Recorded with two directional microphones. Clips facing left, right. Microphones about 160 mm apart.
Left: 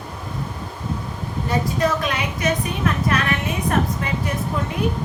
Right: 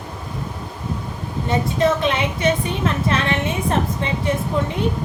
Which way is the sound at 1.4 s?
25° right (ahead or behind).